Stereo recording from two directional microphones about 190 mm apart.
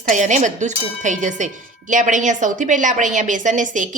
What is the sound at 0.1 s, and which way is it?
A woman's voice, 40° right (ahead or behind).